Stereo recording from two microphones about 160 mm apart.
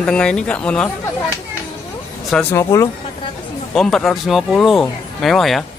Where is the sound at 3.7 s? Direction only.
5° left (ahead or behind).